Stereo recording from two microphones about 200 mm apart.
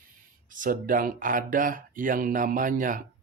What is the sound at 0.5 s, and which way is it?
Speech, 40° right (ahead or behind).